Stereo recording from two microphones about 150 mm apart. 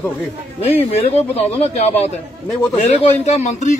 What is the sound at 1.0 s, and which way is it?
Speech, 45° left (ahead or behind).